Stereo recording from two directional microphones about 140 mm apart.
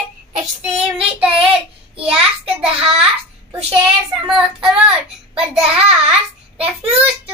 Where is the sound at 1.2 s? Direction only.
5° right (ahead or behind).